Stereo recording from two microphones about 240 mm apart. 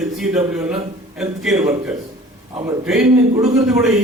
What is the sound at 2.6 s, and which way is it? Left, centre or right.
A man's voice, centre.